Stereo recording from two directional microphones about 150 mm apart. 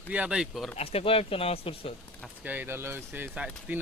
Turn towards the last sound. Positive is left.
turn(degrees=-10)  # may be behind; listen again after turning